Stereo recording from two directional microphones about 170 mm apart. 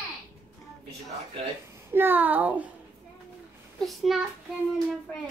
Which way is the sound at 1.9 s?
10° right (ahead or behind).